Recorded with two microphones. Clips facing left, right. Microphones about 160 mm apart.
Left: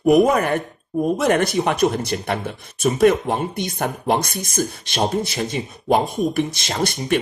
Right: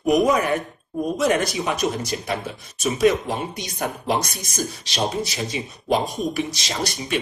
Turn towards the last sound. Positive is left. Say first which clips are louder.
# left 5 dB
turn(degrees=55)  # may be behind; listen again after turning